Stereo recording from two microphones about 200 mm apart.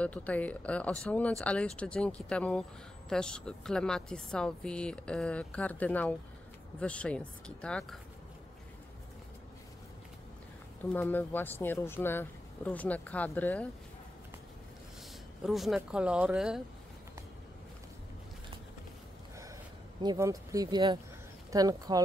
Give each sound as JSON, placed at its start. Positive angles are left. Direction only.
{"t": 0.0, "sound": "a woman's voice", "side_deg": 5}
{"t": 10.8, "sound": "speech", "side_deg": 10}
{"t": 15.4, "sound": "a woman's voice", "side_deg": 0}
{"t": 20.0, "sound": "speech", "side_deg": -20}